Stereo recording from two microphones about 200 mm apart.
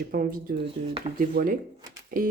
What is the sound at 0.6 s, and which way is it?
Speech, 30° right (ahead or behind).